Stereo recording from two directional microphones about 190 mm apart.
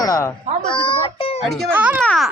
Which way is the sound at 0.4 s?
40° right (ahead or behind).